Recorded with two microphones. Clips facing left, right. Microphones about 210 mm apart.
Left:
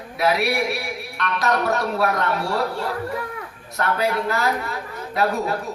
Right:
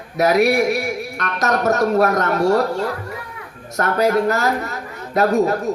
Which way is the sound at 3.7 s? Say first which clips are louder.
Right 5 dB; 45° right (ahead or behind).